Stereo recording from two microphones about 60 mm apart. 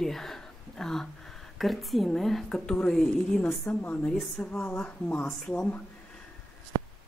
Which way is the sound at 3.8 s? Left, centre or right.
Left.